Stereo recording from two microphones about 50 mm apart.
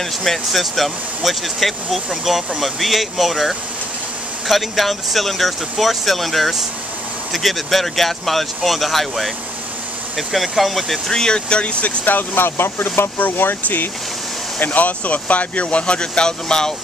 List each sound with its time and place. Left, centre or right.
0.2 s speech: centre; by 12.1 s left
12.1 s speech: left
14.6 s speech: left; by 16.7 s centre